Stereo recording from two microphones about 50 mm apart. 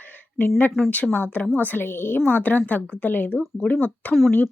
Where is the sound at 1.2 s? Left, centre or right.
Left.